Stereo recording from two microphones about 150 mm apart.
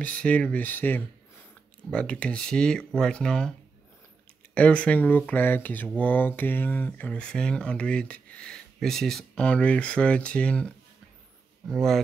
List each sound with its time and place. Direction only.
0.0 s speech: 10° left (ahead or behind)
4.6 s speech: 10° left (ahead or behind)